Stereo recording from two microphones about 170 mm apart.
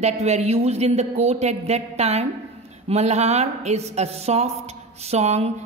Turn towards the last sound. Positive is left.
turn(degrees=-40)  # may be behind; listen again after turning